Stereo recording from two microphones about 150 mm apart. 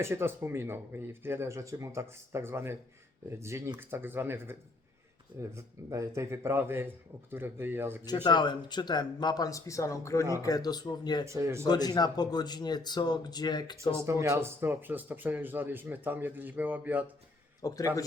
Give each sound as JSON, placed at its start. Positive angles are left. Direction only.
{"t": 0.0, "sound": "speech", "side_deg": -15}
{"t": 8.0, "sound": "speech", "side_deg": 30}
{"t": 11.3, "sound": "speech", "side_deg": -20}
{"t": 11.7, "sound": "speech", "side_deg": 25}
{"t": 13.9, "sound": "speech", "side_deg": -20}
{"t": 17.6, "sound": "speech", "side_deg": 25}